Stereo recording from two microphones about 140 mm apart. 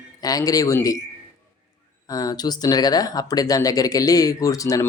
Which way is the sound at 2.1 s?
25° left (ahead or behind).